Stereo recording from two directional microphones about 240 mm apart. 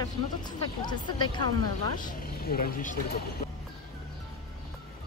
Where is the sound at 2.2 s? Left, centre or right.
Left.